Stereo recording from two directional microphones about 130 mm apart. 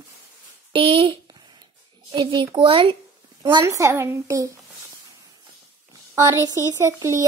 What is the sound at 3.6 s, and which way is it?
Speech, 20° right (ahead or behind).